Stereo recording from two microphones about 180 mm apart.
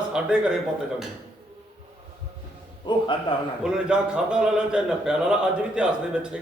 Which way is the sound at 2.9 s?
25° left (ahead or behind).